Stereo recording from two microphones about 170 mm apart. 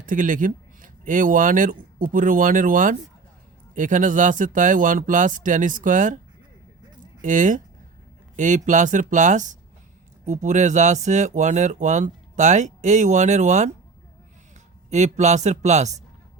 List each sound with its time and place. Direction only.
0.1 s speech: 50° right (ahead or behind)
7.2 s speech: 50° right (ahead or behind)
14.8 s speech: 45° right (ahead or behind)